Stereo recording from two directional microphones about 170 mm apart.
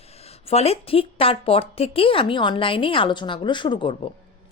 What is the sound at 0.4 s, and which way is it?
A woman's voice, 35° left (ahead or behind).